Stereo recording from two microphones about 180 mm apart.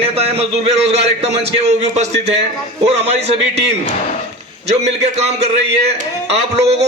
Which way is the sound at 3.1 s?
35° right (ahead or behind).